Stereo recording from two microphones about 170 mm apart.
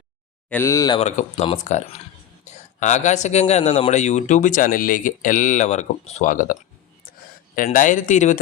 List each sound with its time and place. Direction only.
0.5 s speech: 15° left (ahead or behind)
0.9 s a man's voice: 40° left (ahead or behind)